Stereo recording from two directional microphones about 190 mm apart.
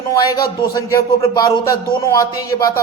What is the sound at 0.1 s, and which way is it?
Speech, 20° left (ahead or behind).